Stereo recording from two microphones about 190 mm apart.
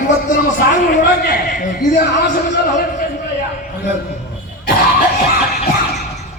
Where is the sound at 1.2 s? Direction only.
50° left (ahead or behind).